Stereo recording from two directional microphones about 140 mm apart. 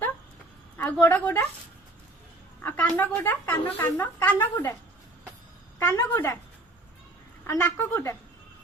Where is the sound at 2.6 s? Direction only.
10° left (ahead or behind).